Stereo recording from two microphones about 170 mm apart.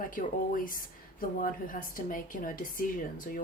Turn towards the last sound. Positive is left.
turn(degrees=55)  # may be behind; listen again after turning